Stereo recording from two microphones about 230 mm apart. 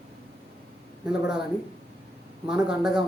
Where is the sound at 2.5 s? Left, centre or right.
Centre.